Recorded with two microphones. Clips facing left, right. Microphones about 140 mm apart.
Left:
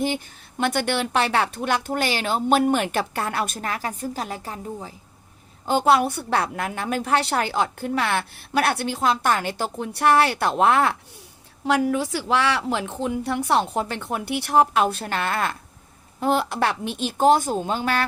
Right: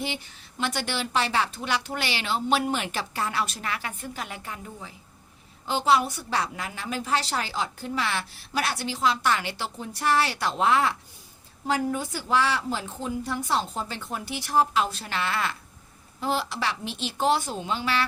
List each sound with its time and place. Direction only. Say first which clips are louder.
0.6 s speech: left 6 dB; 55° left (ahead or behind); by 4.9 s 35° left (ahead or behind)
5.6 s a woman's voice: left 4 dB; 55° left (ahead or behind)
9.7 s a woman's voice: left 6 dB; 65° left (ahead or behind)
11.6 s a woman's voice: left 5 dB; 80° left; by 18.0 s 50° left (ahead or behind)